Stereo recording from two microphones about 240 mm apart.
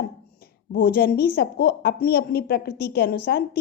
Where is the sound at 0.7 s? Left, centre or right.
Left.